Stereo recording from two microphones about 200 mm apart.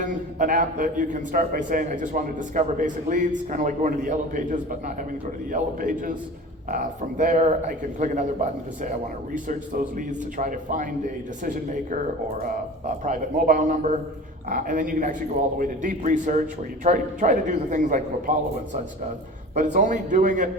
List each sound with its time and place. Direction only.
0.0 s a man's voice: 40° right (ahead or behind)
13.1 s a man's voice: 40° right (ahead or behind)